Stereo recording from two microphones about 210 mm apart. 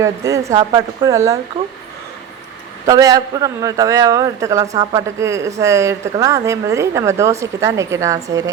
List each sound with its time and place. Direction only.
0.0 s a woman's voice: 15° right (ahead or behind)
2.8 s a woman's voice: 15° right (ahead or behind)